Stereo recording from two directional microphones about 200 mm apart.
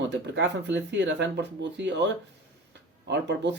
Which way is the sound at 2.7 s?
60° right (ahead or behind).